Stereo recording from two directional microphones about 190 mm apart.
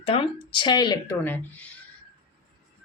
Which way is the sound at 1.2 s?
10° left (ahead or behind).